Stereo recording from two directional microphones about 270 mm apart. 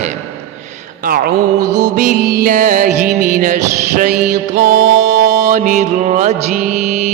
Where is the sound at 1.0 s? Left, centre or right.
Right.